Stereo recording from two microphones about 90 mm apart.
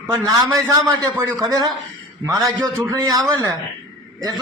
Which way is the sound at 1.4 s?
45° right (ahead or behind).